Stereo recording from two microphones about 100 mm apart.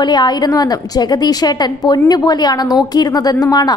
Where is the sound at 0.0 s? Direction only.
45° left (ahead or behind).